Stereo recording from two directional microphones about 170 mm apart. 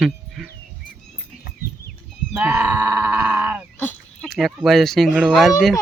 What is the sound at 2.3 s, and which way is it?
Speech, 5° right (ahead or behind).